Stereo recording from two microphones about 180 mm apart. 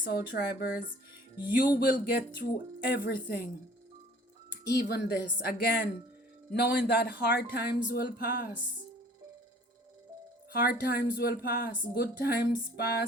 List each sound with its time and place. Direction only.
0.0 s speech: 60° left (ahead or behind)
1.7 s speech: 60° left (ahead or behind)
4.5 s speech: 60° left (ahead or behind)
10.5 s speech: 55° left (ahead or behind)